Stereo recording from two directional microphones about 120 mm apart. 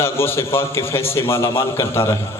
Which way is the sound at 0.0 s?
20° left (ahead or behind).